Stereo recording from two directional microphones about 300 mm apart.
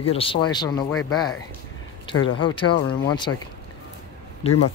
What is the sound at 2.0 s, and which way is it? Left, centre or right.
Speech, centre.